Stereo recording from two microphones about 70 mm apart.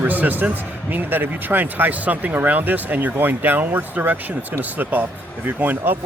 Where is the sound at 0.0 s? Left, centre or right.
Right.